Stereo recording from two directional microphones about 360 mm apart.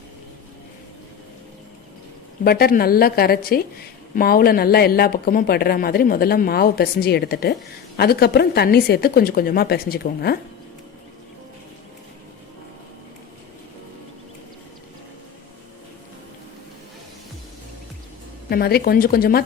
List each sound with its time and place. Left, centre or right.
2.4 s speech: left
18.4 s speech: left